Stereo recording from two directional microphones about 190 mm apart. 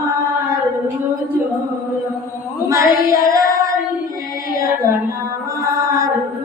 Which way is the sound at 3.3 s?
15° right (ahead or behind).